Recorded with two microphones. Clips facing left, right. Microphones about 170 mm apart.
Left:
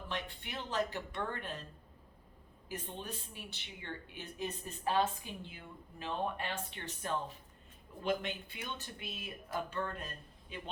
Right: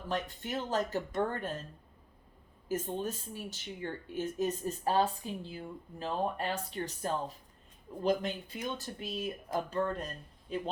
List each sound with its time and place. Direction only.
0.1 s speech: 40° right (ahead or behind)
2.6 s speech: 45° right (ahead or behind)